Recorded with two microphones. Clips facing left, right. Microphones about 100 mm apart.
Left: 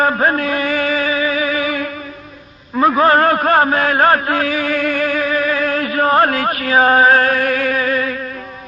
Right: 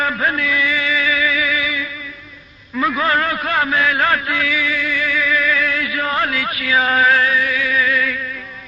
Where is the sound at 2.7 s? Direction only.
40° left (ahead or behind).